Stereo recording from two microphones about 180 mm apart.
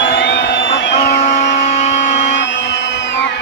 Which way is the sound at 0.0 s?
85° left.